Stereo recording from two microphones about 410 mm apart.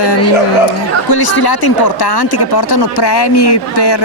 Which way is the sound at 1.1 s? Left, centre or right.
Left.